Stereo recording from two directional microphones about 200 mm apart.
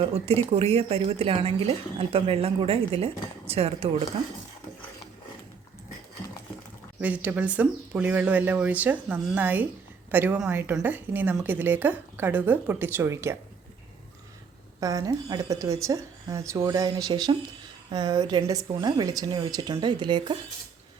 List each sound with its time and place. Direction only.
0.0 s a woman's voice: 30° right (ahead or behind)
7.0 s a woman's voice: 5° right (ahead or behind)
14.8 s a woman's voice: 15° right (ahead or behind)